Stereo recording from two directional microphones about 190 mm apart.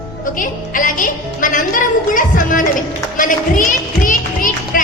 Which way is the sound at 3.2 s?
45° left (ahead or behind).